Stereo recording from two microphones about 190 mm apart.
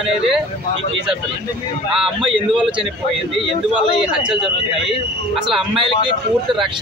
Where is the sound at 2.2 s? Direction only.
Centre (ahead or behind).